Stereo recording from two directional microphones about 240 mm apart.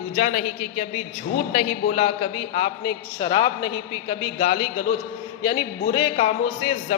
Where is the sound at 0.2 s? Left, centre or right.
Left.